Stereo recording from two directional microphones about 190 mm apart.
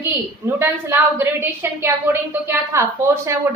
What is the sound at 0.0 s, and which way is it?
A woman's voice, 10° right (ahead or behind).